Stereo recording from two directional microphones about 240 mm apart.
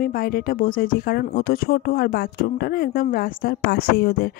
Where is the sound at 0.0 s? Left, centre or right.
Left.